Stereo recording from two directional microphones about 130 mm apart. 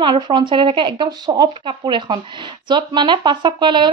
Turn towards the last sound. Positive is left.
turn(degrees=-35)  # may be behind; listen again after turning